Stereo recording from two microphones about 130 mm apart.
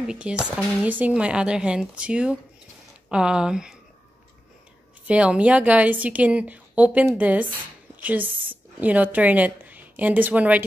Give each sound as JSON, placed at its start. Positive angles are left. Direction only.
{"t": 0.0, "sound": "a woman's voice", "side_deg": -5}
{"t": 5.0, "sound": "a woman's voice", "side_deg": -10}